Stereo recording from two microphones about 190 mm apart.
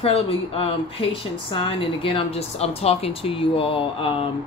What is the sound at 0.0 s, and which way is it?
Speech, 30° left (ahead or behind).